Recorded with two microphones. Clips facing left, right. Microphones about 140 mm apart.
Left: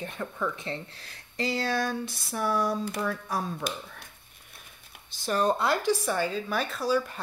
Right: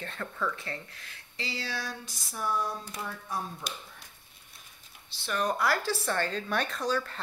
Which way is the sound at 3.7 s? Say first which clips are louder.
Left 7 dB; 60° left (ahead or behind).